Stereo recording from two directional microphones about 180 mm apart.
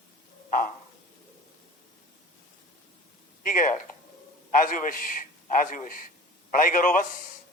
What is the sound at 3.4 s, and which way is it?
A man's voice, 45° left (ahead or behind).